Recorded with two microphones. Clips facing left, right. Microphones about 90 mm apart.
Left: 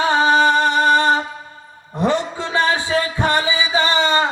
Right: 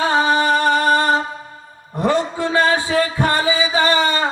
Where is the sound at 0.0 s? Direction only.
20° left (ahead or behind).